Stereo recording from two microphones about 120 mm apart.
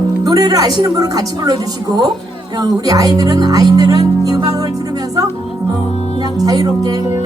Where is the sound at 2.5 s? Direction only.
30° right (ahead or behind).